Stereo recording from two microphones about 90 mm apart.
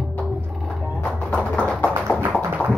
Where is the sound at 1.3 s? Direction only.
10° left (ahead or behind).